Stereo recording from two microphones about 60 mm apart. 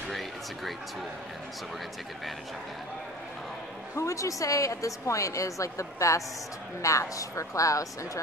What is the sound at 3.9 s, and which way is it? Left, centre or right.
A woman's voice, left.